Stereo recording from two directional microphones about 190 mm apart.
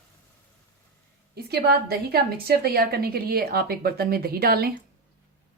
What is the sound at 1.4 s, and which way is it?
A woman's voice, 55° right (ahead or behind).